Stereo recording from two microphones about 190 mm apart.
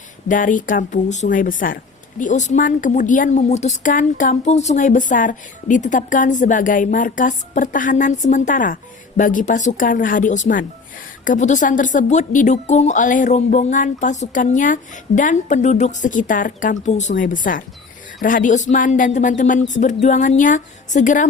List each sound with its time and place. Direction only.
0.3 s speech: 45° left (ahead or behind)